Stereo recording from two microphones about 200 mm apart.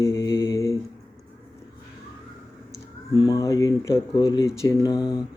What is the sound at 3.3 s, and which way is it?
Mantra, 15° left (ahead or behind).